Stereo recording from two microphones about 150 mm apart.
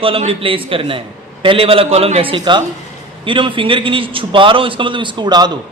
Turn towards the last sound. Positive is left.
turn(degrees=-30)  # may be behind; listen again after turning